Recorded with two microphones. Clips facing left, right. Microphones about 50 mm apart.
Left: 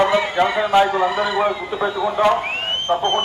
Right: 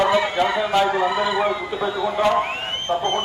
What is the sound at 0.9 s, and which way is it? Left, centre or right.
A man's voice, centre.